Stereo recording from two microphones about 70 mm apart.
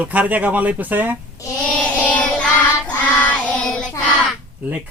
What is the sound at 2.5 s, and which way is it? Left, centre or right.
Child singing, left.